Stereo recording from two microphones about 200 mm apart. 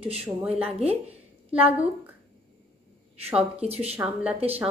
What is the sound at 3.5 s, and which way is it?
Speech, 30° right (ahead or behind).